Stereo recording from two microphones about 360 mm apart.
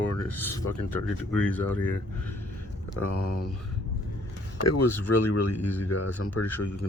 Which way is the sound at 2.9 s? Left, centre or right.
Left.